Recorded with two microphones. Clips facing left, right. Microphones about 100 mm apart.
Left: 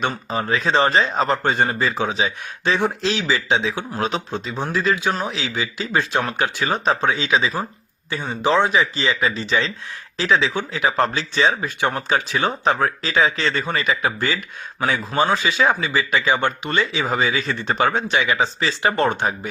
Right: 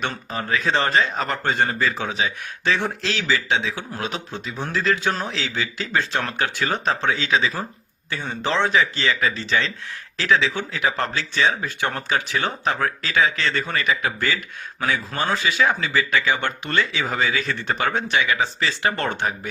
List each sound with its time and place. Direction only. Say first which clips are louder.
0.0 s speech: left 4 dB; 20° left (ahead or behind)
3.9 s speech: left 7 dB; 35° left (ahead or behind)
4.3 s speech: left 4 dB; 25° left (ahead or behind)